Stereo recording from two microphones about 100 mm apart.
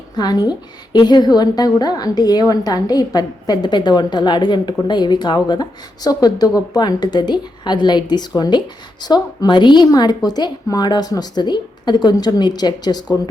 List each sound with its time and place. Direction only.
0.2 s a woman's voice: 45° left (ahead or behind)